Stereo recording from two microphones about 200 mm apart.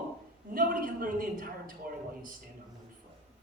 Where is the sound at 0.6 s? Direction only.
45° right (ahead or behind).